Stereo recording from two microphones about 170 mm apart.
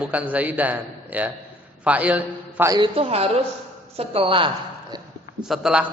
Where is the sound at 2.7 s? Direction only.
30° right (ahead or behind).